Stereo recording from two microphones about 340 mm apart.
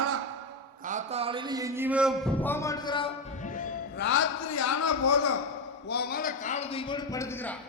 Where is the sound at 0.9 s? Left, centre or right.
Centre; by 4.0 s left.